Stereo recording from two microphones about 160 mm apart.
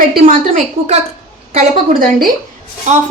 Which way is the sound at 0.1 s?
55° right (ahead or behind).